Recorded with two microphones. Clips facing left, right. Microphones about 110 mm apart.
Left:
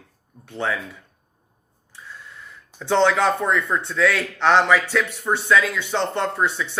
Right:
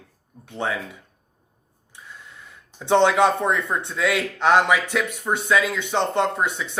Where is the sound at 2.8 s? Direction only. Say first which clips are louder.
Right 1 dB; 20° right (ahead or behind).